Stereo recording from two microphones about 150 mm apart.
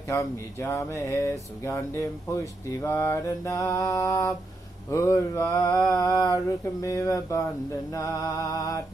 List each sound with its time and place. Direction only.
0.1 s speech: 15° left (ahead or behind)